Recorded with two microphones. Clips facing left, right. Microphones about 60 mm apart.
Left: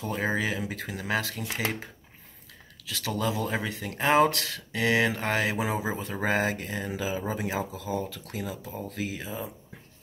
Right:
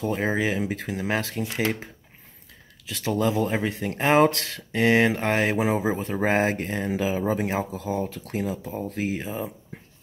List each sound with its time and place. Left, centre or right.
0.0 s speech: right
2.9 s speech: right
6.2 s speech: right